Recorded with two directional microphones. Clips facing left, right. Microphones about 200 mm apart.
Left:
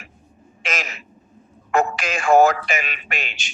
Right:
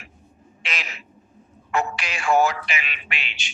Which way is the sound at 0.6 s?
45° left (ahead or behind).